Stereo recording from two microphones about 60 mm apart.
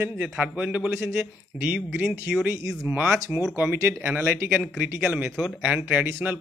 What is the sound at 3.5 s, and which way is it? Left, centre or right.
Speech, right.